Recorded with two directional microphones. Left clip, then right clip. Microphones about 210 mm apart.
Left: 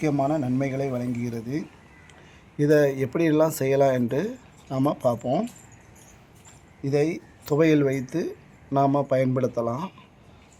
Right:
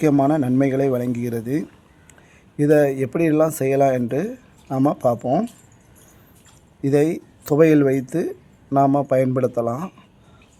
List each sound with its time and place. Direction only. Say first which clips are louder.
0.0 s a man's voice: right 7 dB; 35° right (ahead or behind)
2.6 s speech: right 4 dB; 20° right (ahead or behind)
6.8 s speech: right 6 dB; 30° right (ahead or behind)